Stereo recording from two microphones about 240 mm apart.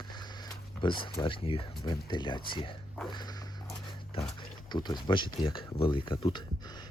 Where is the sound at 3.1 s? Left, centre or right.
Centre.